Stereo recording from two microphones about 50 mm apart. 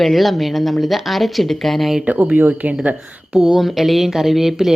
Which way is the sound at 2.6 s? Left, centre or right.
Right.